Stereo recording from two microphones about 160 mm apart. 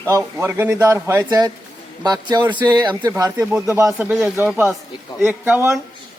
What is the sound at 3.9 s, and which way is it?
A man's voice, 5° right (ahead or behind).